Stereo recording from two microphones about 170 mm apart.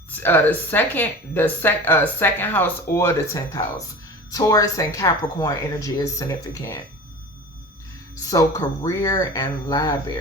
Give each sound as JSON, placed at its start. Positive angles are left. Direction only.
{"t": 0.2, "sound": "speech", "side_deg": 10}
{"t": 8.3, "sound": "speech", "side_deg": 20}